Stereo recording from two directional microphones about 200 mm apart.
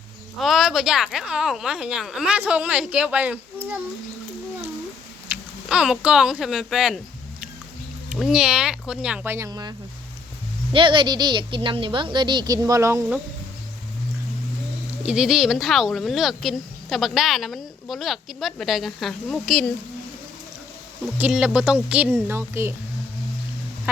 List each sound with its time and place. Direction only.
0.3 s speech: centre (ahead or behind)
5.3 s speech: 5° right (ahead or behind)
8.1 s speech: 5° right (ahead or behind)
15.0 s speech: 5° right (ahead or behind)
21.2 s speech: 5° right (ahead or behind)